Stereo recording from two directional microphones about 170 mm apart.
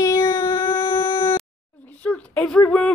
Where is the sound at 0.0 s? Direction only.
20° left (ahead or behind).